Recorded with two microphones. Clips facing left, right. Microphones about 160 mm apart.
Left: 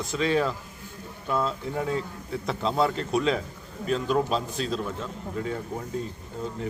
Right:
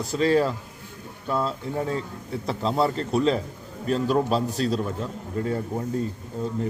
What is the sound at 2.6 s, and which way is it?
Speech, 5° right (ahead or behind).